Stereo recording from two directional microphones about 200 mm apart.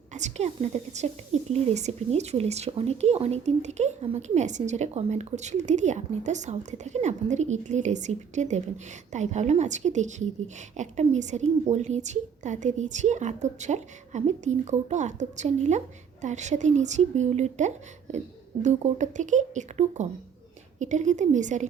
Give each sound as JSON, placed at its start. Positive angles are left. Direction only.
{"t": 0.1, "sound": "a woman's voice", "side_deg": -35}